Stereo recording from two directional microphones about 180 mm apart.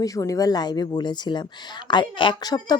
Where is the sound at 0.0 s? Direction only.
20° left (ahead or behind).